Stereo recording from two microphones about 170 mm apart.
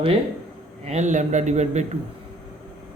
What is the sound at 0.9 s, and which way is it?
Speech, 45° right (ahead or behind).